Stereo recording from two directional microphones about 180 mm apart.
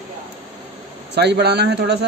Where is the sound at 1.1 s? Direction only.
70° right (ahead or behind).